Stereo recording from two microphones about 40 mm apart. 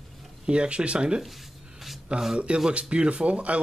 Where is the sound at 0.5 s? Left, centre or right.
Right.